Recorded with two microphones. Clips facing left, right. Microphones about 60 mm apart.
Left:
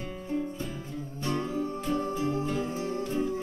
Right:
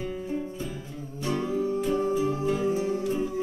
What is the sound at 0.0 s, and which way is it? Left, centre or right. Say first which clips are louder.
Music: right 1 dB; centre.